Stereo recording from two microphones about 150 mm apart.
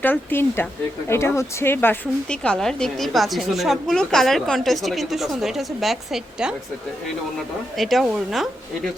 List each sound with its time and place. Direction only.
0.0 s speech: 15° left (ahead or behind); by 6.5 s centre (ahead or behind)
7.8 s speech: centre (ahead or behind)